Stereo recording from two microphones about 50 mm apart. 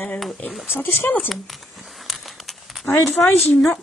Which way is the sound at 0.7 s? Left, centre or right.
Left.